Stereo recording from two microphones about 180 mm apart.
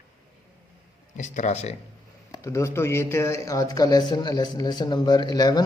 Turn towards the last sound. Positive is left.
turn(degrees=20)  # may be behind; listen again after turning